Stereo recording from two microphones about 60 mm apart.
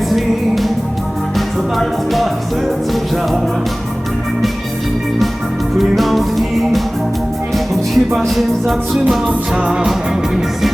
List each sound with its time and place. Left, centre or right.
0.1 s music: centre
1.7 s music: centre
6.0 s music: centre
9.2 s music: centre